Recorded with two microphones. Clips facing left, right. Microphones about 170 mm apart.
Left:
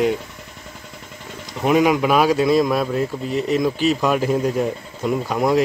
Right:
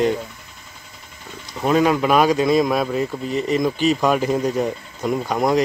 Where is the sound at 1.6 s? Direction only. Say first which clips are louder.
Left 1 dB; 15° left (ahead or behind).